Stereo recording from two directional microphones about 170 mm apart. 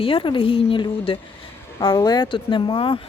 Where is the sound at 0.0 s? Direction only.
30° left (ahead or behind).